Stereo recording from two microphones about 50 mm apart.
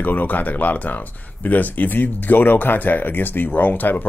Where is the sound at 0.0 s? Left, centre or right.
Left.